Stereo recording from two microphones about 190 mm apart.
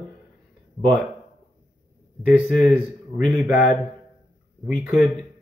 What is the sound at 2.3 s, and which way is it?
Speech, 10° right (ahead or behind).